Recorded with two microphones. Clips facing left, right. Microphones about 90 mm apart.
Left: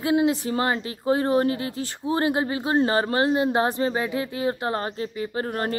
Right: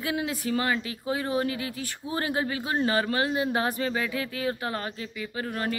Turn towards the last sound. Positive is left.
turn(degrees=40)  # may be behind; listen again after turning